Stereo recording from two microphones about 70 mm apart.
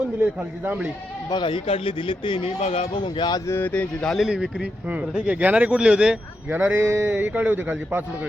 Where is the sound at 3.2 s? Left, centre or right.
Left.